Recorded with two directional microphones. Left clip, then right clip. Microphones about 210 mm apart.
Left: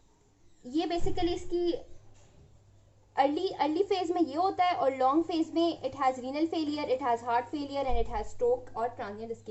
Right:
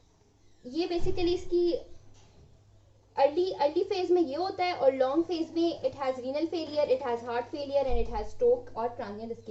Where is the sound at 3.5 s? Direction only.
40° left (ahead or behind).